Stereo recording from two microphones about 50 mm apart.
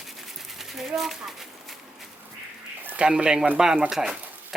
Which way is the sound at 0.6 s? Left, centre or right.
Centre.